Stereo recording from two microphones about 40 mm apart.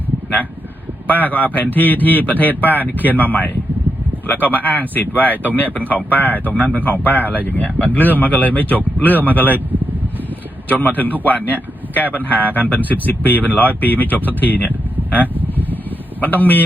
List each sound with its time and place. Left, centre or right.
1.0 s speech: left
10.7 s speech: left